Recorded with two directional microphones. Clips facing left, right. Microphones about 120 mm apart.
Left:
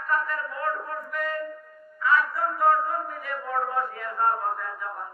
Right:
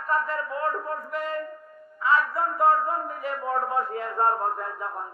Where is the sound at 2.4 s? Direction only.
30° right (ahead or behind).